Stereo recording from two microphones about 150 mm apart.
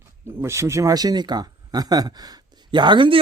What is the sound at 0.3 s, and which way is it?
Speech, 15° right (ahead or behind).